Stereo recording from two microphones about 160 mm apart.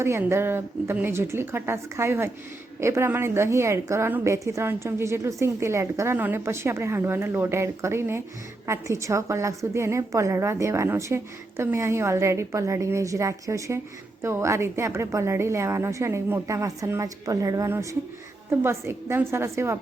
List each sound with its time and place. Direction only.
0.0 s a woman's voice: 15° right (ahead or behind)